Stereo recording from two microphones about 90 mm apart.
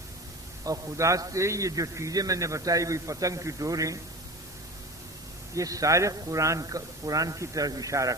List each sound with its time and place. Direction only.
0.6 s a man's voice: 35° right (ahead or behind)
5.5 s a man's voice: 40° right (ahead or behind)